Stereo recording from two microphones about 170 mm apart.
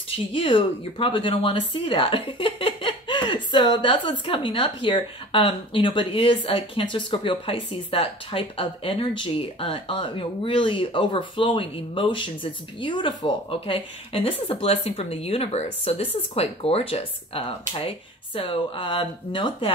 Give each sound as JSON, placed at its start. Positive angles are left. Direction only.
{"t": 0.1, "sound": "speech", "side_deg": 30}